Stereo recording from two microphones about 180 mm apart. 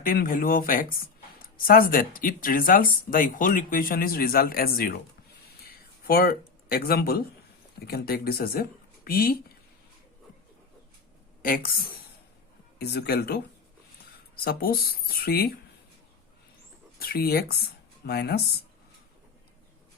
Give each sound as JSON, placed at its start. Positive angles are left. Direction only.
{"t": 0.0, "sound": "speech", "side_deg": 50}
{"t": 6.1, "sound": "speech", "side_deg": 55}
{"t": 11.4, "sound": "speech", "side_deg": 55}
{"t": 17.0, "sound": "speech", "side_deg": 55}